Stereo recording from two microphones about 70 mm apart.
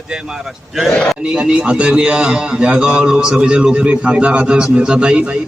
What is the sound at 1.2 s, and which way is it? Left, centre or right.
A man's voice, centre.